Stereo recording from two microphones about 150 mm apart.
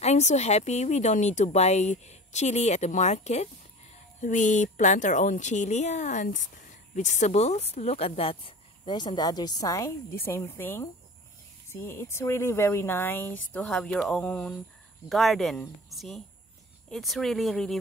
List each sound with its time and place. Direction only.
0.0 s a woman's voice: 50° left (ahead or behind); by 13.6 s 15° left (ahead or behind)
13.6 s speech: 5° left (ahead or behind)